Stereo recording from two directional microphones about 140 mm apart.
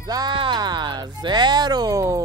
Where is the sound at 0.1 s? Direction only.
30° right (ahead or behind).